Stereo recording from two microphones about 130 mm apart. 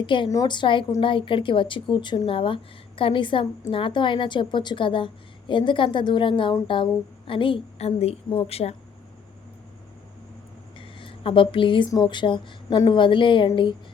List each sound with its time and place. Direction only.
0.0 s speech: 40° left (ahead or behind)
10.8 s a sound: 45° left (ahead or behind)
11.9 s speech: 35° left (ahead or behind)